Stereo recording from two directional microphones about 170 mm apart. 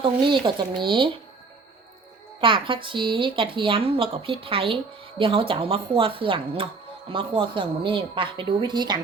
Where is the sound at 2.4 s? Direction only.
30° right (ahead or behind).